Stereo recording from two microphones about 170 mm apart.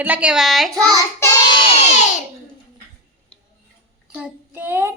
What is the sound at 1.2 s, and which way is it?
Child singing, 20° left (ahead or behind).